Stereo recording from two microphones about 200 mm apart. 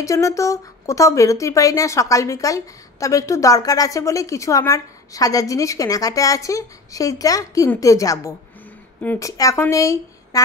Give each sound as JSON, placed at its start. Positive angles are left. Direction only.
{"t": 0.0, "sound": "speech", "side_deg": 15}